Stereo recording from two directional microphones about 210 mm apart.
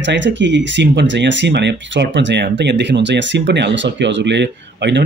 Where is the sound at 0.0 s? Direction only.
60° right (ahead or behind).